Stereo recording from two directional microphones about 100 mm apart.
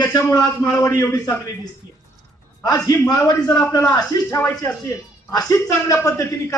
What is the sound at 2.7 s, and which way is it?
A man's voice, 35° left (ahead or behind).